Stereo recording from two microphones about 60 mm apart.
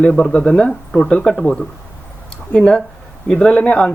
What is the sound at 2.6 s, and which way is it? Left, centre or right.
Speech, centre.